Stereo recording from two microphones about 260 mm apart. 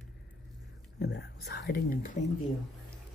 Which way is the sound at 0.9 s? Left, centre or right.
Left.